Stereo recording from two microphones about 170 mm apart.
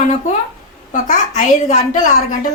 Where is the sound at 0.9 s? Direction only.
45° left (ahead or behind).